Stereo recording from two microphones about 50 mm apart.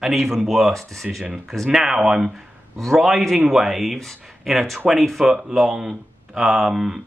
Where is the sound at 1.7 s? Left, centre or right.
Centre.